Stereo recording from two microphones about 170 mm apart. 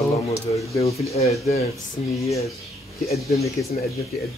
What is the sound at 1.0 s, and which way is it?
Speech, 40° left (ahead or behind).